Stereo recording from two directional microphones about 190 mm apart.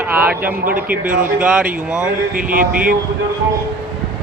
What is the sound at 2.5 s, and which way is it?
Speech, 45° right (ahead or behind).